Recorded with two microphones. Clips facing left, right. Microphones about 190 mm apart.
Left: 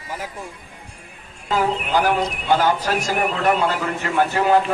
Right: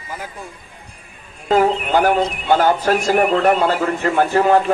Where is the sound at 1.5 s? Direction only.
50° right (ahead or behind).